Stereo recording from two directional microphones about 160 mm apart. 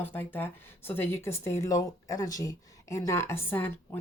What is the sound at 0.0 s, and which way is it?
Speech, 10° left (ahead or behind).